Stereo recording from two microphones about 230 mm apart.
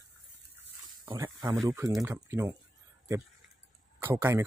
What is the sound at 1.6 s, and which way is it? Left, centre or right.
Speech, centre.